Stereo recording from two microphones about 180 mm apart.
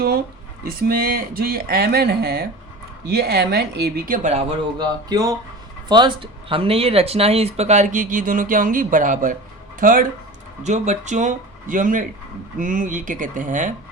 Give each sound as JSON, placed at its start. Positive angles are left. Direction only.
{"t": 0.6, "sound": "speech", "side_deg": -55}
{"t": 4.8, "sound": "speech", "side_deg": -20}
{"t": 10.6, "sound": "speech", "side_deg": -40}